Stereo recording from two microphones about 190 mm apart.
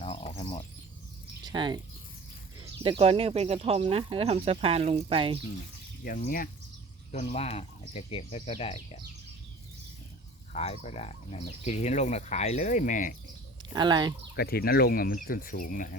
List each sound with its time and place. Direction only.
0.0 s a sound: 30° left (ahead or behind)
1.5 s speech: 25° right (ahead or behind)
3.0 s speech: 30° right (ahead or behind)
6.1 s speech: 45° left (ahead or behind)
7.1 s speech: 35° left (ahead or behind)
10.5 s speech: 35° left (ahead or behind)
13.7 s speech: 25° right (ahead or behind)
14.3 s speech: 55° left (ahead or behind)